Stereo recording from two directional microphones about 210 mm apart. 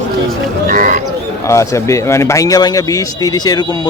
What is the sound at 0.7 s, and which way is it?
Speech, 40° right (ahead or behind).